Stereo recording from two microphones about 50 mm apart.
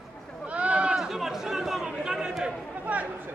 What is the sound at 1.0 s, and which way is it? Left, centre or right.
Chatter, centre.